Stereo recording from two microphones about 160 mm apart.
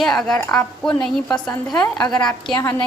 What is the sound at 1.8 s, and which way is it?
Speech, 25° left (ahead or behind).